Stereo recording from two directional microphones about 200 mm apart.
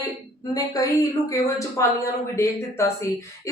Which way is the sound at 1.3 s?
15° left (ahead or behind).